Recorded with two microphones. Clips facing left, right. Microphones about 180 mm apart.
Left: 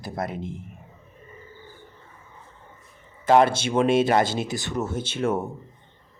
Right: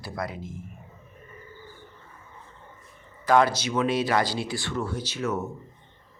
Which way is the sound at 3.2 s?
25° left (ahead or behind).